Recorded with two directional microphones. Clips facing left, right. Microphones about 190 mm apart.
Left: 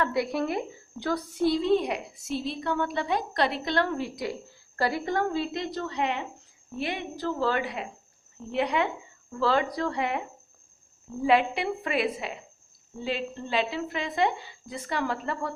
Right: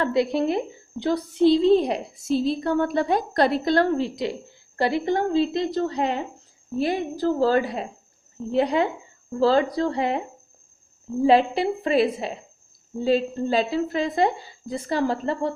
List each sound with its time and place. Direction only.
0.0 s a woman's voice: 25° right (ahead or behind)